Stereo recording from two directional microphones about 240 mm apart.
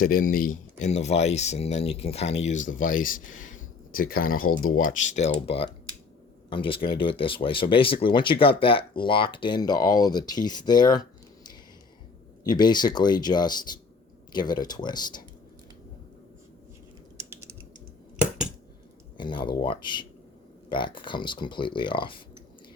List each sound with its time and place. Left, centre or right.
0.0 s speech: left; by 11.0 s centre
12.5 s speech: centre
19.1 s speech: centre